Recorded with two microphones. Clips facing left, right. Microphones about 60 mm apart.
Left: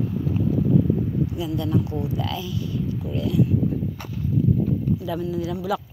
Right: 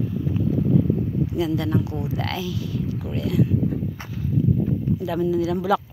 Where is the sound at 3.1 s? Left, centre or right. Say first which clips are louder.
Even; right.